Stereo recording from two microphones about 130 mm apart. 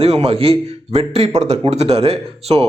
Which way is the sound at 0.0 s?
55° right (ahead or behind).